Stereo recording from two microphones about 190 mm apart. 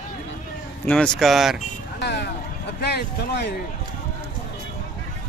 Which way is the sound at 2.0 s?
65° left (ahead or behind).